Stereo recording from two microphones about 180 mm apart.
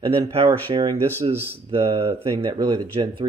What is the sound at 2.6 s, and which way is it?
Speech, 25° right (ahead or behind).